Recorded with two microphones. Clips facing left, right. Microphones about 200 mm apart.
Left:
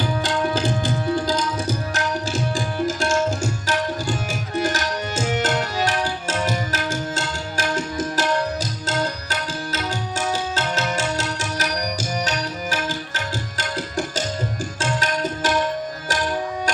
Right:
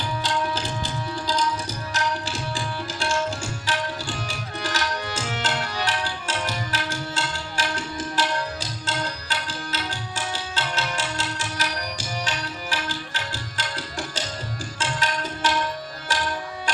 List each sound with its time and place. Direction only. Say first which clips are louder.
0.2 s tabla: left 3 dB; 50° left (ahead or behind)